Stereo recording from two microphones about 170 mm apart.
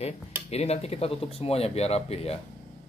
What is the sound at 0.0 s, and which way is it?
Speech, 40° left (ahead or behind).